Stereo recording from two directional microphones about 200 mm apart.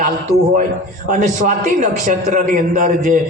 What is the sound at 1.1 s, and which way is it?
A man's voice, 35° right (ahead or behind).